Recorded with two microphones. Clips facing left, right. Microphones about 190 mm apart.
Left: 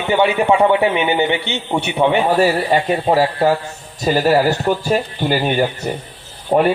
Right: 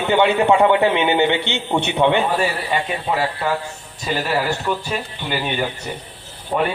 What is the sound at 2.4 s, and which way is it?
Speech, 40° left (ahead or behind).